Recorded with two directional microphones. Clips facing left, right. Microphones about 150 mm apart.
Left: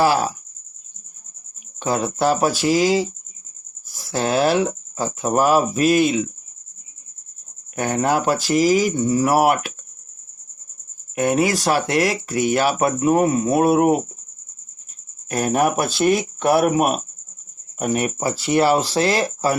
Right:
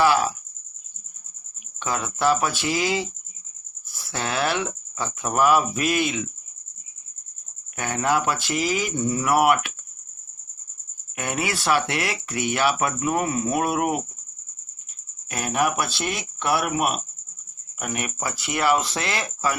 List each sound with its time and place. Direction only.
0.0 s speech: 35° left (ahead or behind)
1.8 s speech: 35° left (ahead or behind)
7.8 s speech: 40° left (ahead or behind)
11.1 s speech: 40° left (ahead or behind)
15.3 s speech: 40° left (ahead or behind)